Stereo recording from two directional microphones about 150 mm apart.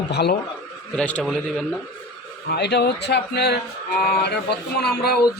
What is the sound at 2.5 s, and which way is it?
A man's voice, 90° left.